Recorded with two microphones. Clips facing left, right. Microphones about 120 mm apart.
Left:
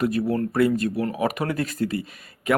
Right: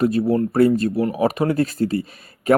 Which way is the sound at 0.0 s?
30° right (ahead or behind).